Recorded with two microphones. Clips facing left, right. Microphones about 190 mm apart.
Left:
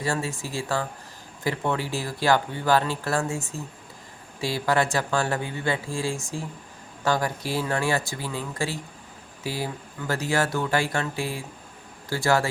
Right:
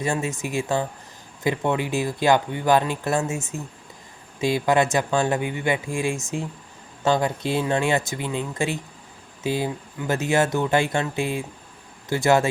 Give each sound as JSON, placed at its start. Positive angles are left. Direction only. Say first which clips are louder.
{"t": 0.0, "sound": "speech", "louder": "right 3 dB", "side_deg": -20}